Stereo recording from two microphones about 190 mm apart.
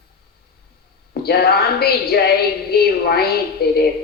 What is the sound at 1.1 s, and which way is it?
A woman's voice, 55° left (ahead or behind).